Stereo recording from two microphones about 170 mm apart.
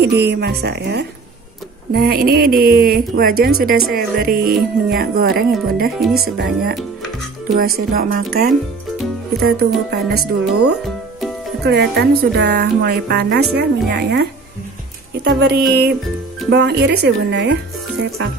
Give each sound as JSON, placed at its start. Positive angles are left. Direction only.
{"t": 0.0, "sound": "speech", "side_deg": -75}
{"t": 1.9, "sound": "speech", "side_deg": -65}
{"t": 7.5, "sound": "speech", "side_deg": -60}
{"t": 15.2, "sound": "speech", "side_deg": -75}
{"t": 18.0, "sound": "speech", "side_deg": -75}